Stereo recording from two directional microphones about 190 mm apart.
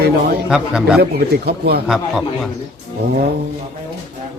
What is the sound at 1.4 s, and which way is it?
Speech, 55° right (ahead or behind).